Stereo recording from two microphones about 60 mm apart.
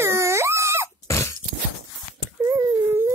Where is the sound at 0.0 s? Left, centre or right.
Right.